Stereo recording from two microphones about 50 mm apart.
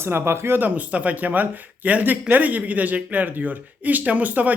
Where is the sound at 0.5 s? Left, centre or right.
Right.